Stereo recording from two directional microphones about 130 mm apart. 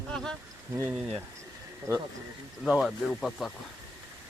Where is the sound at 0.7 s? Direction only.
20° right (ahead or behind).